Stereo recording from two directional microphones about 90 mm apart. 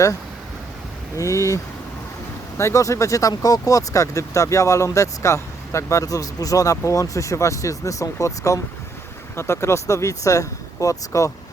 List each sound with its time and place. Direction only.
1.1 s speech: 35° left (ahead or behind)